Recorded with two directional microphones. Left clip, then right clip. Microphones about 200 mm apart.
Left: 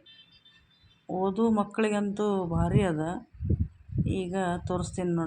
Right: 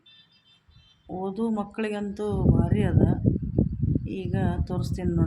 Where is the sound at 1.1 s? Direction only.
Centre (ahead or behind).